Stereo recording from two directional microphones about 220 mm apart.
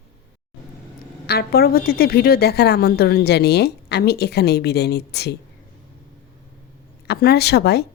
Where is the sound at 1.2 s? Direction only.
45° left (ahead or behind).